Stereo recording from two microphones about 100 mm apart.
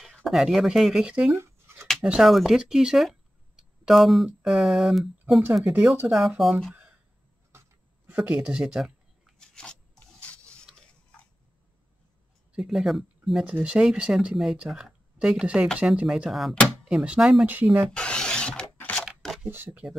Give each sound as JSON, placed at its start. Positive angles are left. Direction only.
{"t": 0.0, "sound": "speech", "side_deg": 0}
{"t": 1.3, "sound": "a sound", "side_deg": -25}
{"t": 2.0, "sound": "speech", "side_deg": -5}
{"t": 6.7, "sound": "a sound", "side_deg": -10}
{"t": 8.1, "sound": "speech", "side_deg": -10}
{"t": 9.4, "sound": "rub", "side_deg": 5}
{"t": 12.5, "sound": "speech", "side_deg": -5}
{"t": 13.5, "sound": "speech", "side_deg": -15}
{"t": 17.5, "sound": "speech", "side_deg": -15}
{"t": 17.9, "sound": "a sound", "side_deg": 10}
{"t": 19.5, "sound": "speech", "side_deg": -15}